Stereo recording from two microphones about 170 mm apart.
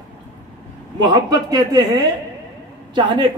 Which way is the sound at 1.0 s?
25° right (ahead or behind).